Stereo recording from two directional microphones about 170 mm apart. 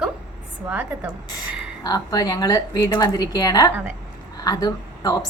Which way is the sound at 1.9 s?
25° left (ahead or behind).